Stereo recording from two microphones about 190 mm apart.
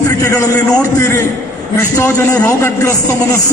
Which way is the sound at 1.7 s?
15° left (ahead or behind).